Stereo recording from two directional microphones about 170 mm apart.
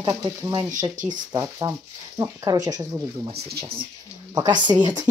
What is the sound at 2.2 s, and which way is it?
Speech, 20° right (ahead or behind).